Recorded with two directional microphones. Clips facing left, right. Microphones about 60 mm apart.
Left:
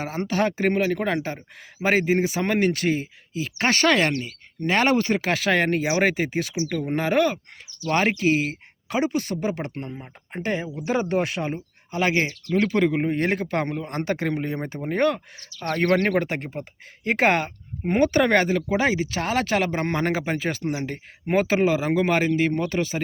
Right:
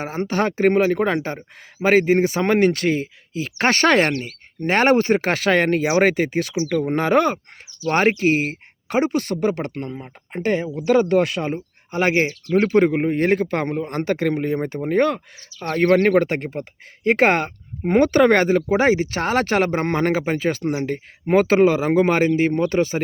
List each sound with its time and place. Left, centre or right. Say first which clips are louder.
0.0 s speech: right 2 dB; right
7.9 s speech: right 4 dB; right
11.9 s speech: right 4 dB; right